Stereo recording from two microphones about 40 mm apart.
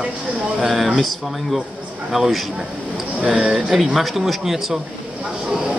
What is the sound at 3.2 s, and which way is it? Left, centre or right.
Speech, centre.